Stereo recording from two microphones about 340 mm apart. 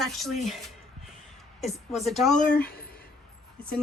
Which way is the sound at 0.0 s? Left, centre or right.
Centre.